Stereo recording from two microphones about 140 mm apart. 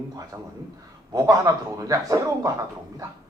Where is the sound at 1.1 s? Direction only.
25° right (ahead or behind).